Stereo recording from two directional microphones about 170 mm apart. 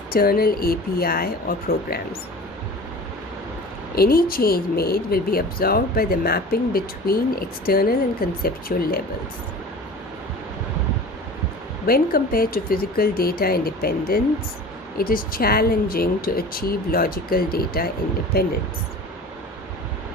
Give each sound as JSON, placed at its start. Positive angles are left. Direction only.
{"t": 0.1, "sound": "speech", "side_deg": 60}
{"t": 3.9, "sound": "speech", "side_deg": 60}
{"t": 11.9, "sound": "speech", "side_deg": 60}